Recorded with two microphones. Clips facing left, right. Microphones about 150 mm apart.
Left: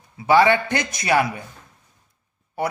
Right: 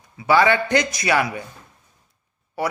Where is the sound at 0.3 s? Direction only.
20° left (ahead or behind).